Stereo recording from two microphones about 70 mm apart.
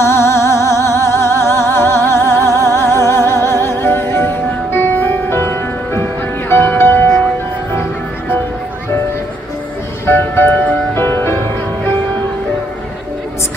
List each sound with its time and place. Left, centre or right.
0.0 s music: left
10.0 s music: left